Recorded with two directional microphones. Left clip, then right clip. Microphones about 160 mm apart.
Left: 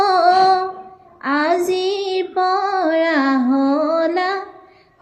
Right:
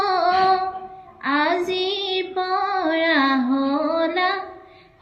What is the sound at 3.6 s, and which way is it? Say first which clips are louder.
Music: left 4 dB; 10° right (ahead or behind).